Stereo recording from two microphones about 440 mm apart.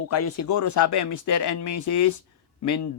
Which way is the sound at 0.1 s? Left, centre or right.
Left.